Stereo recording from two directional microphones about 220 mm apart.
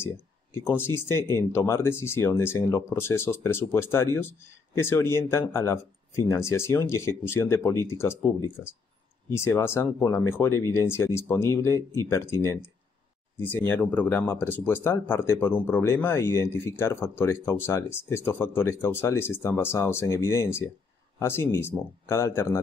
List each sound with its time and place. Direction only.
0.7 s speech: 10° left (ahead or behind)
9.3 s speech: 10° left (ahead or behind)